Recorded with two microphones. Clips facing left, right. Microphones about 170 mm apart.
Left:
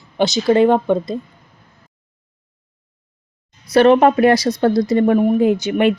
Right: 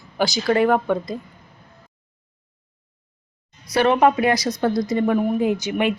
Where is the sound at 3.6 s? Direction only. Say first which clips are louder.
Left 6 dB; 30° left (ahead or behind).